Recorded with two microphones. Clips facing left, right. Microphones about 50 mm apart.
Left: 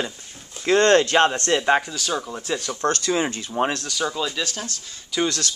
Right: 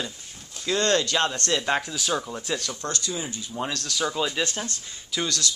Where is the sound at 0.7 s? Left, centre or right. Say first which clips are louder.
Left 7 dB; left.